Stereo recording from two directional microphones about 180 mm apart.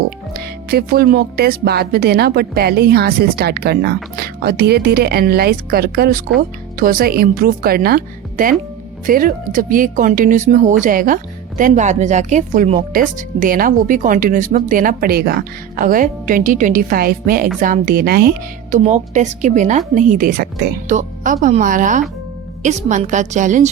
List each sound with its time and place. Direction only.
0.3 s speech: 60° right (ahead or behind)
18.9 s a woman's voice: 40° right (ahead or behind)